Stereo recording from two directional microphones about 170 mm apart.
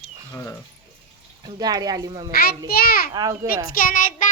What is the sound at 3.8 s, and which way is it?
Child singing, 55° left (ahead or behind).